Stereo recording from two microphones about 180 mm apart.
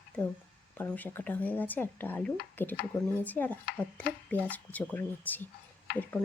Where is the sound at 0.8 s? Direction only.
10° left (ahead or behind).